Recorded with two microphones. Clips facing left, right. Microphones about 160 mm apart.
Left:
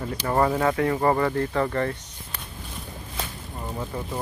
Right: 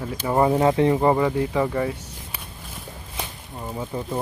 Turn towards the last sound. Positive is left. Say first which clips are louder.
# right 3 dB
turn(degrees=-15)  # may be behind; listen again after turning